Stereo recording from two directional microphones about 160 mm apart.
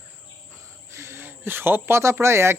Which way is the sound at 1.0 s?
15° right (ahead or behind).